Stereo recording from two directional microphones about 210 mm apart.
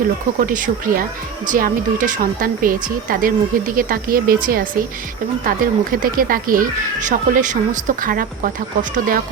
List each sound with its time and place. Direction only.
0.3 s speech: 40° right (ahead or behind)